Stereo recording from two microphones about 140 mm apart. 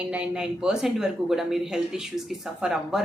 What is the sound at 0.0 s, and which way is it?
A woman's voice, 10° right (ahead or behind).